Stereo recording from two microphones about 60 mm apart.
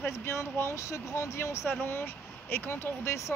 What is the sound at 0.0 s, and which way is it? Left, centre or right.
Speech, left.